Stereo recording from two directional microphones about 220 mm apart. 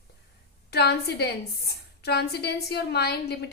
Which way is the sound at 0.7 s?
45° left (ahead or behind).